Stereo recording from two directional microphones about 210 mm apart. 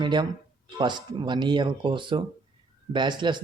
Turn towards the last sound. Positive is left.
turn(degrees=-20)  # may be behind; listen again after turning